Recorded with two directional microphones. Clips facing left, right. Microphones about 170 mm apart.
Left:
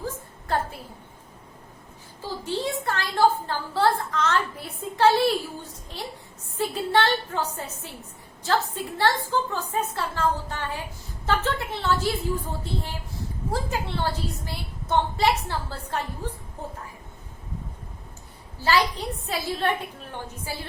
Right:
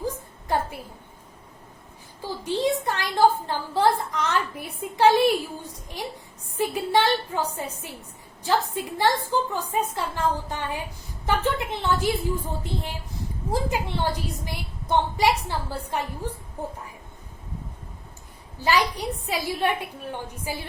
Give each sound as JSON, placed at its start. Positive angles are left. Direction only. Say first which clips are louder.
{"t": 0.0, "sound": "a sound", "louder": "right 3 dB", "side_deg": -15}
{"t": 2.2, "sound": "a woman's voice", "louder": "right 4 dB", "side_deg": -15}
{"t": 13.5, "sound": "a woman's voice", "louder": "right 3 dB", "side_deg": -15}
{"t": 18.6, "sound": "a woman's voice", "louder": "even", "side_deg": -15}